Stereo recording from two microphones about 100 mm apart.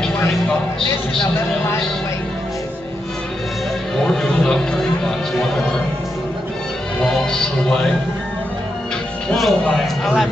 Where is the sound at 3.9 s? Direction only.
5° left (ahead or behind).